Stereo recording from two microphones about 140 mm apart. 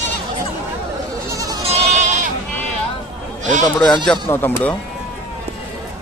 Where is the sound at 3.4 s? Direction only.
60° right (ahead or behind).